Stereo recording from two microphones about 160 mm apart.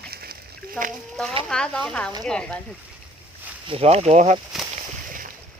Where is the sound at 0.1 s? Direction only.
70° right (ahead or behind).